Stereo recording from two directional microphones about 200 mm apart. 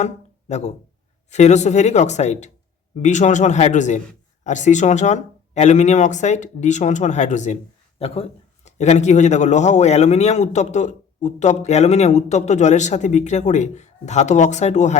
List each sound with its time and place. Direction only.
0.0 s speech: 35° left (ahead or behind)